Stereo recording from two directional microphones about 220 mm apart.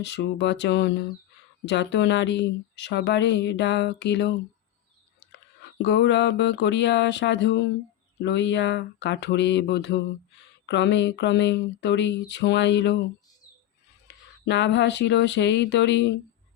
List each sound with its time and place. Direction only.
0.0 s speech: 50° left (ahead or behind)
5.8 s speech: 50° left (ahead or behind)
14.1 s speech: 50° left (ahead or behind)